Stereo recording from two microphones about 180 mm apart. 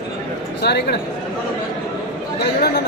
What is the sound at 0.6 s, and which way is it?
Speech, 65° left (ahead or behind).